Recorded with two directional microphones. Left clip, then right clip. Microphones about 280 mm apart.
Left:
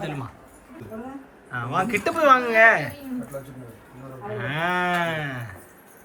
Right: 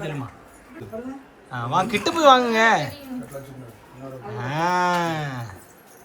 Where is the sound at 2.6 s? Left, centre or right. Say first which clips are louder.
Left 2 dB; centre.